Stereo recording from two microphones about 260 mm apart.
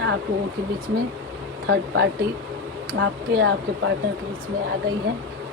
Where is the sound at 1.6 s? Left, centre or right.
Right.